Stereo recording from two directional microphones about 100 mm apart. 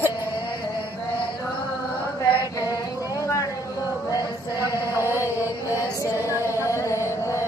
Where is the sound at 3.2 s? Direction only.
30° left (ahead or behind).